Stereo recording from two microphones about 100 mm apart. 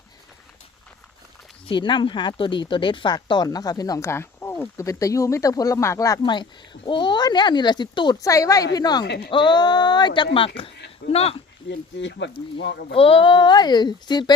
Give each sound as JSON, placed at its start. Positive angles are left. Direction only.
{"t": 1.6, "sound": "speech", "side_deg": 55}
{"t": 4.9, "sound": "speech", "side_deg": 35}
{"t": 6.2, "sound": "speech", "side_deg": 50}
{"t": 8.2, "sound": "speech", "side_deg": 35}
{"t": 11.1, "sound": "speech", "side_deg": 90}
{"t": 12.9, "sound": "speech", "side_deg": 70}